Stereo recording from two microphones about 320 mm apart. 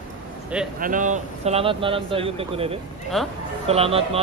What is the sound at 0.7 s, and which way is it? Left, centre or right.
Speech, right.